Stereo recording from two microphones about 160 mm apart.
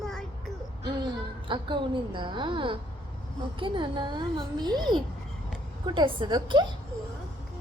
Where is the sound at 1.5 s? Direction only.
30° right (ahead or behind).